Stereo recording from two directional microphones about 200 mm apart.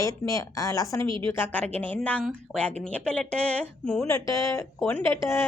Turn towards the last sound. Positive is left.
turn(degrees=15)  # may be behind; listen again after turning